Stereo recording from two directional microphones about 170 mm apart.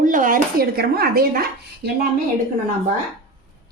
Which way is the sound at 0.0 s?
50° right (ahead or behind).